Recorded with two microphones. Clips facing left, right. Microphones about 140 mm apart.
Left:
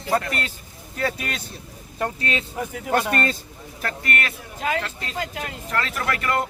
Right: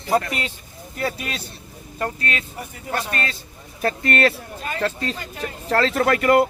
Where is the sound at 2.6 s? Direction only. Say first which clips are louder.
Left 5 dB; 90° left.